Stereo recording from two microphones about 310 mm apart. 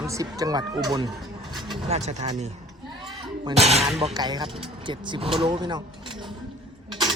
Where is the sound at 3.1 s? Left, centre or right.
Centre.